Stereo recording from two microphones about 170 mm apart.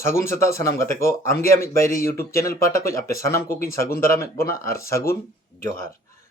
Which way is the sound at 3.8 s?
60° left (ahead or behind).